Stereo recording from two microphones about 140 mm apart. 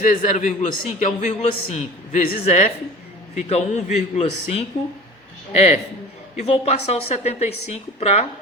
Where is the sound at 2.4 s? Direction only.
50° left (ahead or behind).